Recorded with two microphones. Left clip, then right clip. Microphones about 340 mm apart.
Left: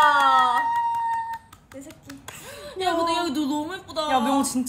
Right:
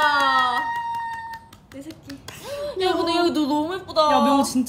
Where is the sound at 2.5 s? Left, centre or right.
Centre.